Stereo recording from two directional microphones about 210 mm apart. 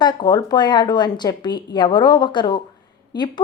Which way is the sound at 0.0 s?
20° left (ahead or behind).